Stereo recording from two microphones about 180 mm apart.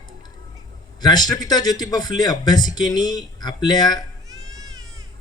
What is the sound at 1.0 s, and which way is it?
A man's voice, 20° left (ahead or behind).